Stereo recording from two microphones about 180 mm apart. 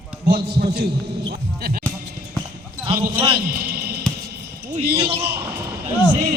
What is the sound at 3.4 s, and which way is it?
Music, 55° right (ahead or behind).